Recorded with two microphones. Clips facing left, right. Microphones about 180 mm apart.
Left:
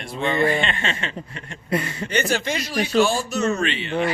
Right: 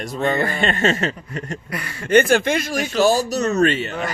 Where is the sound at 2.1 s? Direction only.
55° right (ahead or behind).